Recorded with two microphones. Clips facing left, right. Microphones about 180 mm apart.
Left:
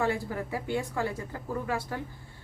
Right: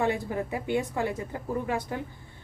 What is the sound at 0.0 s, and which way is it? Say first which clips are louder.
A woman's voice: right 2 dB; 20° right (ahead or behind).